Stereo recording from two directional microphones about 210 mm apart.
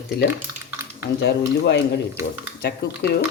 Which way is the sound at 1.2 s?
55° left (ahead or behind).